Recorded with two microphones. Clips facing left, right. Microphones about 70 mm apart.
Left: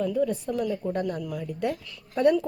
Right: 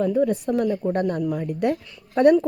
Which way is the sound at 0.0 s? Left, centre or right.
Right.